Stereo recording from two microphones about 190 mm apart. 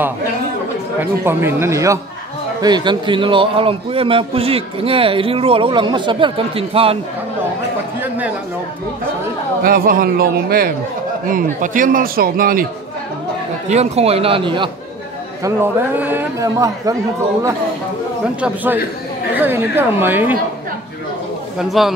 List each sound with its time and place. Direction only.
1.2 s a man's voice: 10° right (ahead or behind); by 7.0 s 30° right (ahead or behind)
9.6 s a man's voice: 50° right (ahead or behind)
13.7 s a man's voice: 35° right (ahead or behind)
15.4 s a man's voice: 10° right (ahead or behind)
18.4 s a man's voice: 10° right (ahead or behind)
21.5 s a man's voice: centre (ahead or behind)